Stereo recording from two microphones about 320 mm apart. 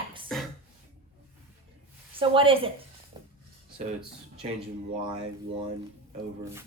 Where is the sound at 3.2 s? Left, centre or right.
Centre.